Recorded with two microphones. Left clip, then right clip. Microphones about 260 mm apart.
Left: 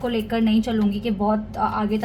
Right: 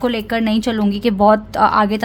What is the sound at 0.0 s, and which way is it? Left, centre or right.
A woman's voice, right.